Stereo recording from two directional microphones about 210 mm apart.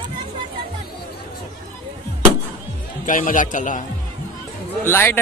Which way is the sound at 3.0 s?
40° left (ahead or behind).